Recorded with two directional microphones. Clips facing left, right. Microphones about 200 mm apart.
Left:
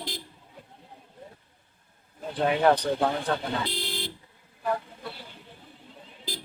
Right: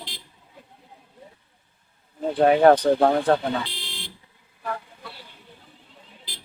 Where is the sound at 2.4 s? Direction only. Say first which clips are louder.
Right 7 dB; 50° right (ahead or behind).